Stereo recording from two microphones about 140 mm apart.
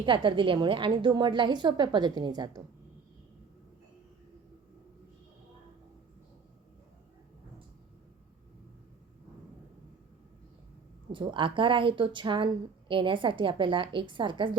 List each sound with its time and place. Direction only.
0.0 s a woman's voice: 35° right (ahead or behind)
11.1 s a woman's voice: 35° right (ahead or behind)